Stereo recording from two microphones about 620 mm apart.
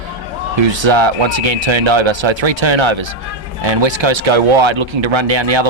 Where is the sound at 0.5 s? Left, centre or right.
Right.